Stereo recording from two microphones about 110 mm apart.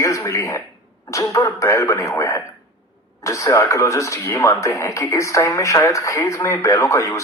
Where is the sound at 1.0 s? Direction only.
30° left (ahead or behind).